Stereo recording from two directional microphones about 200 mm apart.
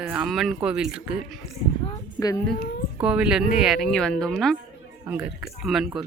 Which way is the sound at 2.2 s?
15° left (ahead or behind).